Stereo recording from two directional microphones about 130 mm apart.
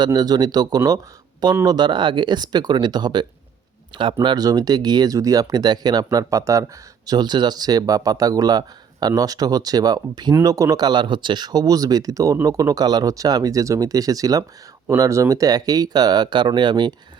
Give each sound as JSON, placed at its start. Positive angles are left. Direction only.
{"t": 0.0, "sound": "speech", "side_deg": -30}